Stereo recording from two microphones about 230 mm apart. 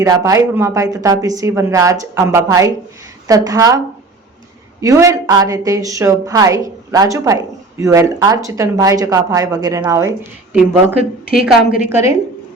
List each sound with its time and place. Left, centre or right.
0.0 s a woman's voice: centre
4.8 s a woman's voice: centre